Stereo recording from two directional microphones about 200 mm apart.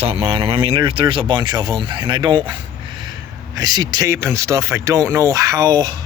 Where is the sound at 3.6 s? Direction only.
20° right (ahead or behind).